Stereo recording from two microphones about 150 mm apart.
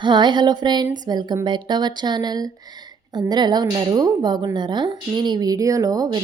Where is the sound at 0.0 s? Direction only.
30° right (ahead or behind).